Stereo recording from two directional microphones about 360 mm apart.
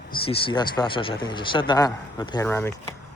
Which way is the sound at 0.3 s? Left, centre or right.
Centre.